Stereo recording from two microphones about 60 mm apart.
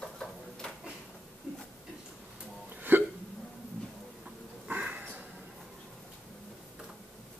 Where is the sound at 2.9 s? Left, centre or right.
Right.